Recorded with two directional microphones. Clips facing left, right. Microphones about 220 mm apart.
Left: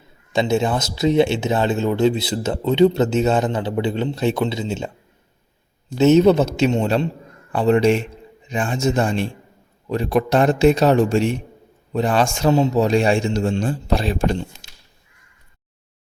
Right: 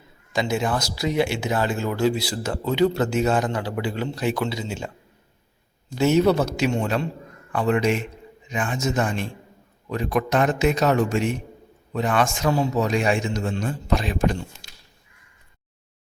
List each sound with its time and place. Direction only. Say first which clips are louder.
0.3 s speech: left 5 dB; 25° left (ahead or behind)
6.0 s speech: left 5 dB; 20° left (ahead or behind)